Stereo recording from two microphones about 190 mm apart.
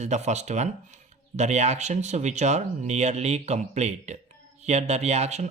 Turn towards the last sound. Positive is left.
turn(degrees=-35)  # may be behind; listen again after turning